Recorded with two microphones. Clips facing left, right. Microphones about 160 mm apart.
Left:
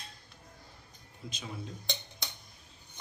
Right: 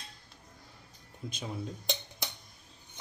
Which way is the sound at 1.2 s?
50° right (ahead or behind).